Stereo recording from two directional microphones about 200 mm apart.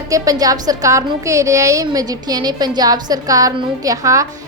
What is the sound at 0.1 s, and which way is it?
A woman's voice, 20° right (ahead or behind).